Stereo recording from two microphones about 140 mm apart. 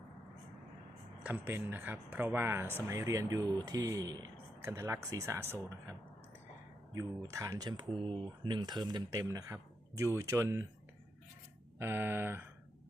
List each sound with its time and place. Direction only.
1.2 s speech: 15° right (ahead or behind)
6.9 s speech: 25° right (ahead or behind)
11.8 s speech: 15° right (ahead or behind)